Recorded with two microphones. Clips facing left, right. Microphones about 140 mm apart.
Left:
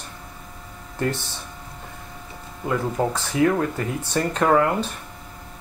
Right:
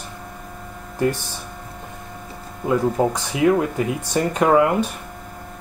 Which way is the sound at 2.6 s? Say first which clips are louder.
Right 4 dB; 15° right (ahead or behind).